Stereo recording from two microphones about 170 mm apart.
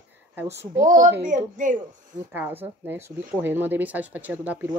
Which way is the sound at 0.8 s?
50° right (ahead or behind).